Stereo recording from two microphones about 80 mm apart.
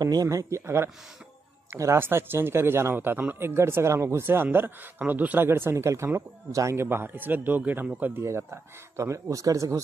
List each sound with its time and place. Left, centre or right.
0.0 s speech: right
1.7 s speech: right
8.2 s speech: right